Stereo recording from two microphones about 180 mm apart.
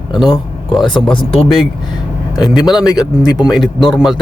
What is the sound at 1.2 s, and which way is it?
Speech, 25° left (ahead or behind).